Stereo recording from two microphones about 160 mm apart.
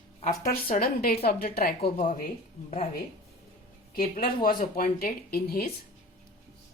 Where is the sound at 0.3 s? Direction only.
65° left (ahead or behind).